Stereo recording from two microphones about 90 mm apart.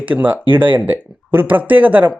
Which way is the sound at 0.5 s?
65° right (ahead or behind).